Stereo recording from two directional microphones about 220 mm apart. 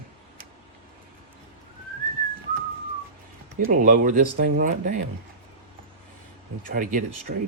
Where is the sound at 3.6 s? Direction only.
35° right (ahead or behind).